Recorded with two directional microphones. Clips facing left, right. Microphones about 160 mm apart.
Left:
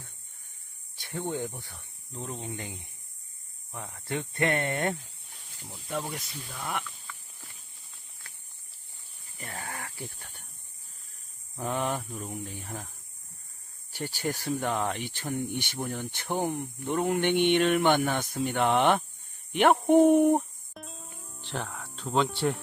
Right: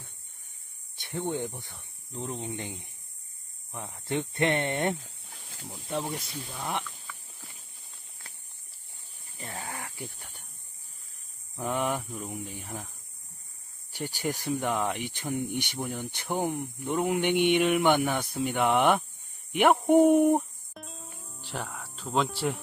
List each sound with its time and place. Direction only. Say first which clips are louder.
0.9 s speech: right 1 dB; 20° right (ahead or behind)
5.0 s a sound: right 5 dB; 90° right
5.6 s speech: right 2 dB; 15° right (ahead or behind)
6.1 s speech: right 2 dB; 25° right (ahead or behind)
9.4 s a sound: right 1 dB; 20° right (ahead or behind)
10.1 s speech: even; 10° right (ahead or behind)
11.5 s speech: right 1 dB; 15° left (ahead or behind)
12.2 s speech: even; 15° right (ahead or behind)
13.9 s speech: even; 15° right (ahead or behind)
20.7 s music: even; centre (ahead or behind)
21.4 s speech: left 1 dB; 5° right (ahead or behind)